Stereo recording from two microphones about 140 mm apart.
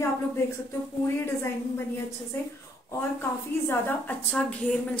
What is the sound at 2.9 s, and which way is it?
A woman's voice, 15° left (ahead or behind).